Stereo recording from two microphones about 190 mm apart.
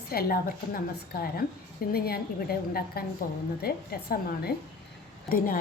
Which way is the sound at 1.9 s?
55° left (ahead or behind).